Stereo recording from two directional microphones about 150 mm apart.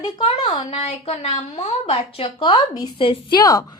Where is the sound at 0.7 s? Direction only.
45° left (ahead or behind).